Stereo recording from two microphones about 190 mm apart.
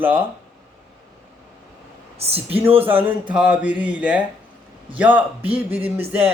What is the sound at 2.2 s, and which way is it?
Speech, 30° right (ahead or behind).